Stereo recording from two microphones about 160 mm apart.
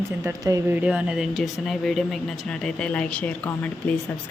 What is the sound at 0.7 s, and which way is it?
Speech, 10° right (ahead or behind).